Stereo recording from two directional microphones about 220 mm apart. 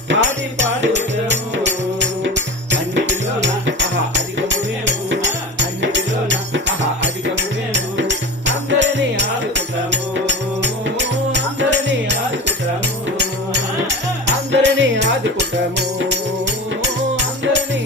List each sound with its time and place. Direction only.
0.1 s music: 55° right (ahead or behind)
14.5 s music: 55° right (ahead or behind)
17.2 s music: 55° right (ahead or behind)